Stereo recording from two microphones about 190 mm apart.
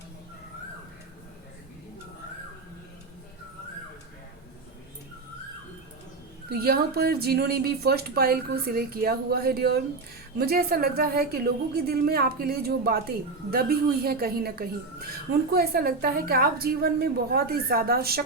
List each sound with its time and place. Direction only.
6.5 s a woman's voice: 55° right (ahead or behind)